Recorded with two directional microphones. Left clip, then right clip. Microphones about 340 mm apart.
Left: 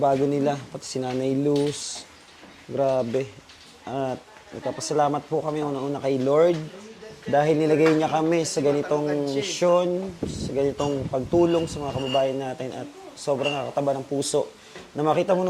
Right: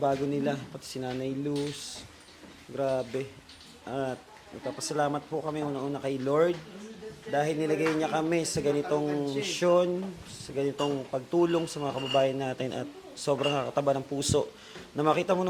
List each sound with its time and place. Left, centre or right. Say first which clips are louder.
0.0 s speech: left 7 dB; centre
7.3 s speech: left 8 dB; centre